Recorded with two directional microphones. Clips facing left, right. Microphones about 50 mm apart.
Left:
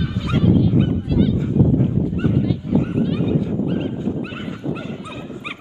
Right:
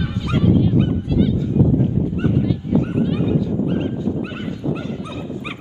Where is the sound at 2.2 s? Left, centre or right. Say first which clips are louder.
Even; centre.